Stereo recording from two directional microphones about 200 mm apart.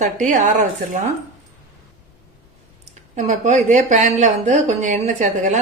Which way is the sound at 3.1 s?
35° right (ahead or behind).